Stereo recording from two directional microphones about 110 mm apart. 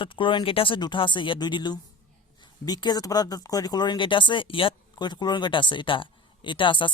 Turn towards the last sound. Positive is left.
turn(degrees=50)  # may be behind; listen again after turning